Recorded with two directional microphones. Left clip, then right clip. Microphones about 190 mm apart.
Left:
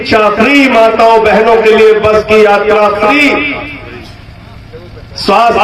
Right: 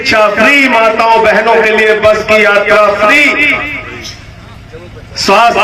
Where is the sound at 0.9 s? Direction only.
45° right (ahead or behind).